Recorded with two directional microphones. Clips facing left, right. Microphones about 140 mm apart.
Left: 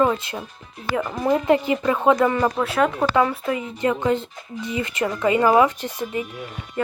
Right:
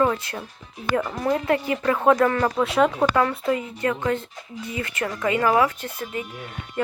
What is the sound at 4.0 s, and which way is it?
Speech, 30° left (ahead or behind).